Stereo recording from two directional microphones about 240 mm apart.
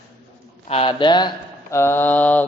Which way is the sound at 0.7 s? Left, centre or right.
Left.